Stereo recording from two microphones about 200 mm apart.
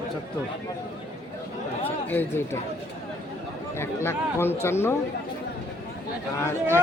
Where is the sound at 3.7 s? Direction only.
10° left (ahead or behind).